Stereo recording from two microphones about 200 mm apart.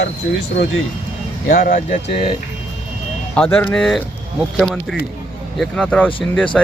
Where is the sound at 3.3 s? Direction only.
5° left (ahead or behind).